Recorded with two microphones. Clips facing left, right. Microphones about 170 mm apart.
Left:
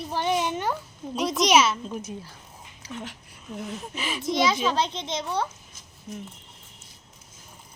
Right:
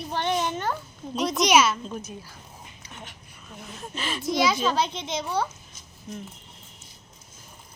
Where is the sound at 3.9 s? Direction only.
10° left (ahead or behind).